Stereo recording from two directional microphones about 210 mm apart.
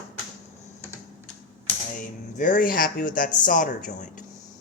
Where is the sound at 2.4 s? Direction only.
40° left (ahead or behind).